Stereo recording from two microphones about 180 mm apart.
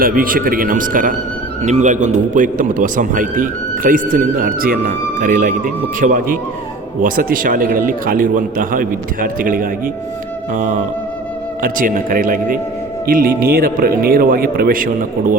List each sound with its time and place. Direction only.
0.0 s a man's voice: 50° right (ahead or behind)